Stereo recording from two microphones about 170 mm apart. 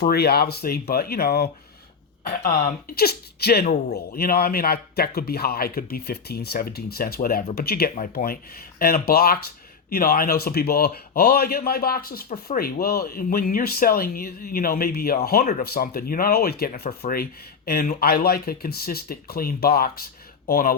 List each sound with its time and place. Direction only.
0.1 s speech: 65° left (ahead or behind)
2.2 s a man's voice: 55° left (ahead or behind)